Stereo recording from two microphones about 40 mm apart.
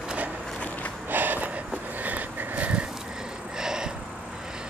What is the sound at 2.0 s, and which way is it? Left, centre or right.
Sniff, right.